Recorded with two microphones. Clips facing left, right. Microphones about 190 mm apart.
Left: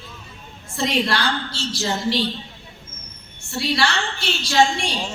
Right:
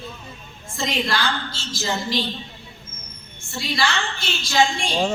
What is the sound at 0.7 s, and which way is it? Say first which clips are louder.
A woman's voice: left 3 dB; 70° left (ahead or behind).